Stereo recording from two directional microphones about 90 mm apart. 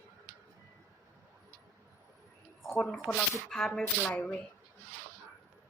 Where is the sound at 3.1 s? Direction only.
5° left (ahead or behind).